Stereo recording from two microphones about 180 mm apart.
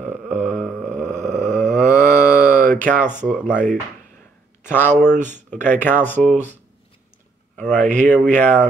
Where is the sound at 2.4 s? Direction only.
45° right (ahead or behind).